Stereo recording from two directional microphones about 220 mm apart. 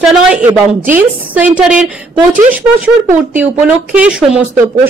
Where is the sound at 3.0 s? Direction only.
5° right (ahead or behind).